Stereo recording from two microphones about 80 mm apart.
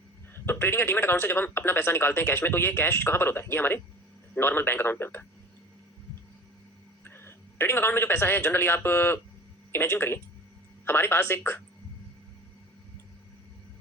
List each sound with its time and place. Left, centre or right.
0.3 s speech: left
7.0 s speech: left